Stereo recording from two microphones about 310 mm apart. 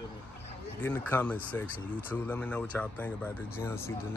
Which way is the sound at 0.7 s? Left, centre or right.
Centre.